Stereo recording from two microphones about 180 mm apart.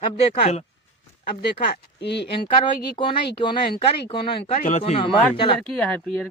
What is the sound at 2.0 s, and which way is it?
Speech, 70° left (ahead or behind).